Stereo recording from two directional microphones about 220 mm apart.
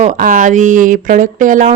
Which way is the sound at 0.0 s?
35° right (ahead or behind).